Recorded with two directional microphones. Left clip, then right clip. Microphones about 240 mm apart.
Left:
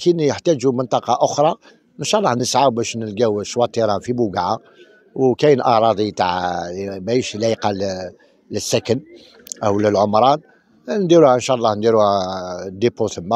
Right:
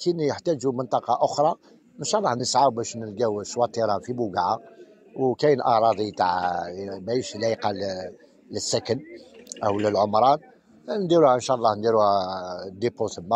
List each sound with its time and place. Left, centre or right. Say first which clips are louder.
0.0 s a man's voice: left 8 dB; left